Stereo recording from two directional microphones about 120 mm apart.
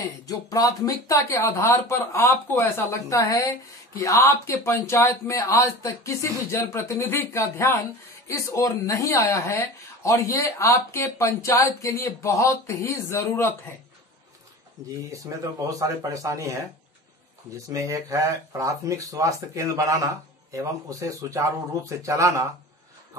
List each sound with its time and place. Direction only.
0.0 s speech: 30° left (ahead or behind)
15.1 s speech: 30° right (ahead or behind)
17.6 s speech: 25° right (ahead or behind)